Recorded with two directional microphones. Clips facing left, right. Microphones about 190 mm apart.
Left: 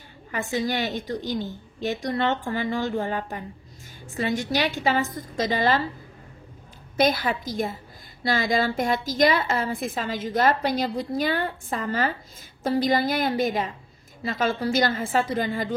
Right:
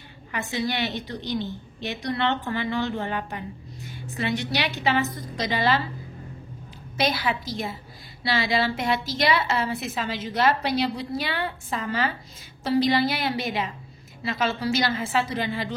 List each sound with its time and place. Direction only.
0.5 s a woman's voice: 40° left (ahead or behind)
7.0 s a woman's voice: 50° left (ahead or behind)